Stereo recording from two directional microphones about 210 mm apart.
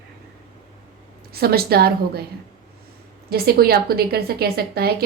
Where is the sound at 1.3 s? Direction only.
45° right (ahead or behind).